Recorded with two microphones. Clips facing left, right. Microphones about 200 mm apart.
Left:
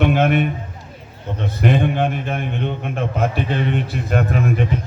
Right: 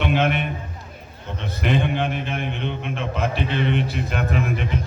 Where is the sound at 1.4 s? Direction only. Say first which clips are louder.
Left 4 dB; 50° left (ahead or behind).